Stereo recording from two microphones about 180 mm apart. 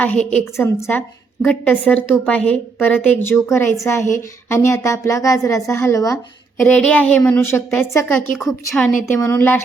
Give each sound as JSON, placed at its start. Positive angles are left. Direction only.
{"t": 0.0, "sound": "a woman's voice", "side_deg": 5}
{"t": 8.4, "sound": "a woman's voice", "side_deg": 5}
{"t": 9.0, "sound": "a woman's voice", "side_deg": 15}